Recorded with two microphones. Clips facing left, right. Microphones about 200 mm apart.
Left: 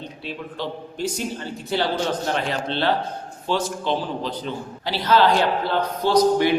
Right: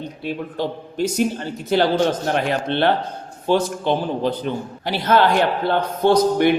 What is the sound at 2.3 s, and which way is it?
A man's voice, 55° right (ahead or behind).